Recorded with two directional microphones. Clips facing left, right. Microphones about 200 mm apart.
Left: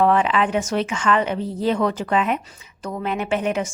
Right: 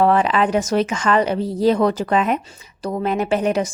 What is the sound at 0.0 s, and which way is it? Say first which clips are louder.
A woman's voice: right 2 dB; 40° right (ahead or behind).